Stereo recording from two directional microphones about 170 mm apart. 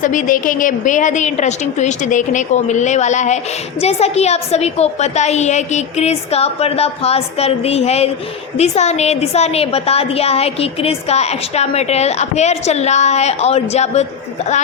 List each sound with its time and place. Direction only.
0.0 s a woman's voice: 50° left (ahead or behind)